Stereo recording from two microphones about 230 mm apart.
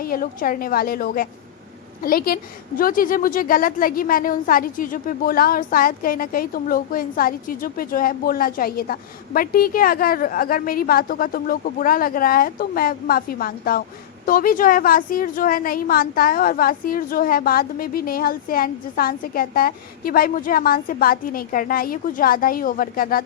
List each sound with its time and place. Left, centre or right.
0.0 s a woman's voice: left